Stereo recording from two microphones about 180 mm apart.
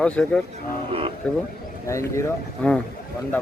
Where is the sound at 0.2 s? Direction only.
5° left (ahead or behind).